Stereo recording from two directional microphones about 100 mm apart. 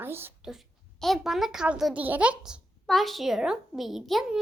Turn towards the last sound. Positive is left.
turn(degrees=-5)  # may be behind; listen again after turning